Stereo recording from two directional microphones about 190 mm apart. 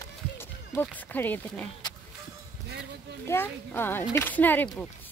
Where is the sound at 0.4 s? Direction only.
10° left (ahead or behind).